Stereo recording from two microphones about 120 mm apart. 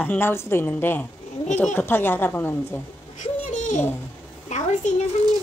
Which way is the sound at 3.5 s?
90° left.